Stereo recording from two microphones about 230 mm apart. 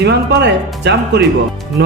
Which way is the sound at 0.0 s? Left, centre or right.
Right.